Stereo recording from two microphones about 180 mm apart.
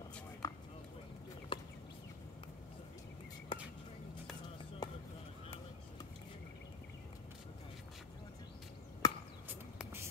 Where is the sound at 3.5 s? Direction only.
30° left (ahead or behind).